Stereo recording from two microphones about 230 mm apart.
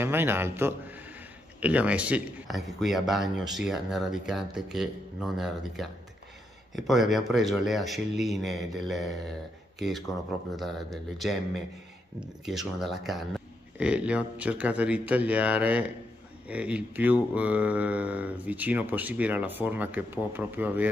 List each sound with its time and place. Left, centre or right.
0.0 s a man's voice: centre